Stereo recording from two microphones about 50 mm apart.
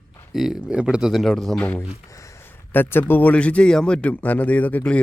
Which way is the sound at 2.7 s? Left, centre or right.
Left.